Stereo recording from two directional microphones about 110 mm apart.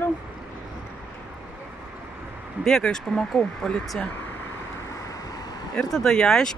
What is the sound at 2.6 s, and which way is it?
A man's voice, 5° left (ahead or behind).